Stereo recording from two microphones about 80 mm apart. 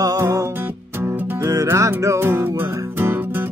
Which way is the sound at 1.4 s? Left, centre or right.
Right.